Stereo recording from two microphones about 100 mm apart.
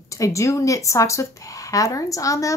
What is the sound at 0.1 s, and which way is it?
Speech, 30° left (ahead or behind).